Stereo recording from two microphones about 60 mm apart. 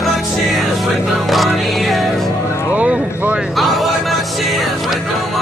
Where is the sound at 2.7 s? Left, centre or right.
Right.